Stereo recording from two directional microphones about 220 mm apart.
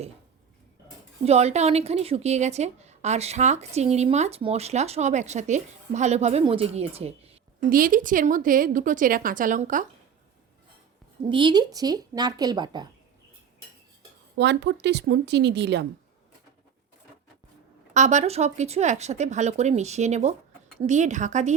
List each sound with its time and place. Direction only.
1.2 s a woman's voice: 30° right (ahead or behind)
7.7 s speech: 40° right (ahead or behind)
11.3 s speech: 20° right (ahead or behind)
14.3 s speech: 50° right (ahead or behind)
17.9 s speech: 30° right (ahead or behind)